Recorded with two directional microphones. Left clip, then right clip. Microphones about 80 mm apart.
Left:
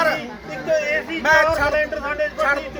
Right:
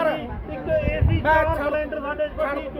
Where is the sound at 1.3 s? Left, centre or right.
Centre.